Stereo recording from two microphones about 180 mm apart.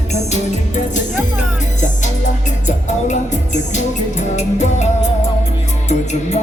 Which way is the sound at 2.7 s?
40° left (ahead or behind).